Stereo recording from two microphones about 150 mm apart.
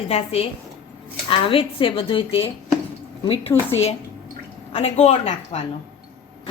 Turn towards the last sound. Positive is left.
turn(degrees=45)  # may be behind; listen again after turning